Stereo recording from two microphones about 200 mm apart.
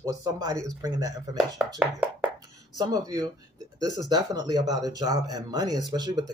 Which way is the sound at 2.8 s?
20° right (ahead or behind).